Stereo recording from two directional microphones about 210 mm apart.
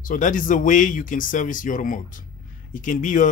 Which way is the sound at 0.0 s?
40° left (ahead or behind).